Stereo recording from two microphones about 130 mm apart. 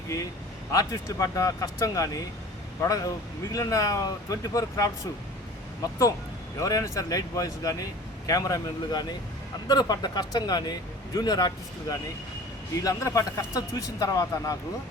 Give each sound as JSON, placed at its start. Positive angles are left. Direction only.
{"t": 0.7, "sound": "speech", "side_deg": 25}